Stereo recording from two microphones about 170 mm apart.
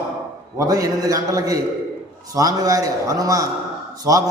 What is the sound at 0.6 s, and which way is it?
A man's voice, 20° right (ahead or behind).